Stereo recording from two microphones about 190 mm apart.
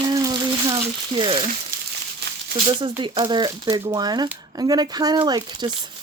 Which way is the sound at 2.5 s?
25° right (ahead or behind).